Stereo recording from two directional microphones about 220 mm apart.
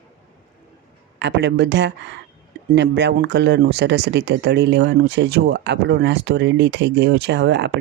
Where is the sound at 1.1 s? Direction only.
50° right (ahead or behind).